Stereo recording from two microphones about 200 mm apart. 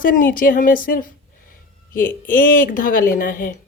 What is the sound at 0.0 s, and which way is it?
Speech, 45° left (ahead or behind).